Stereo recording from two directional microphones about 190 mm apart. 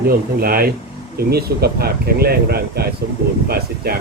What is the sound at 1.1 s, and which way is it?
Speech, 55° right (ahead or behind).